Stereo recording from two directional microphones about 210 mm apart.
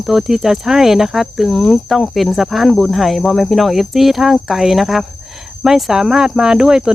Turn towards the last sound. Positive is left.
turn(degrees=-5)  # may be behind; listen again after turning